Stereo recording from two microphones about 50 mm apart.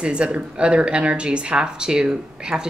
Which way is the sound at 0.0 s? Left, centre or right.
Right.